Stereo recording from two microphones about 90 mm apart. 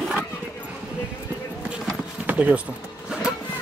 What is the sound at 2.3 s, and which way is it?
Speech, 15° right (ahead or behind).